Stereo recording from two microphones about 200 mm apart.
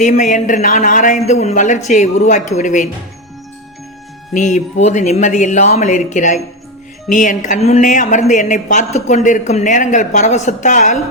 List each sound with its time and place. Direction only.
0.0 s a woman's voice: 40° left (ahead or behind)
4.4 s a woman's voice: 35° left (ahead or behind)